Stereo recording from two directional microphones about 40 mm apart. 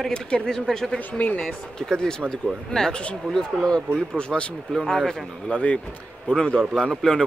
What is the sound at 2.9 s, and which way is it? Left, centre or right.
Speech, left.